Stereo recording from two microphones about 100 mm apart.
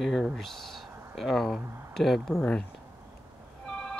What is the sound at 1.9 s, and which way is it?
Speech, 5° left (ahead or behind).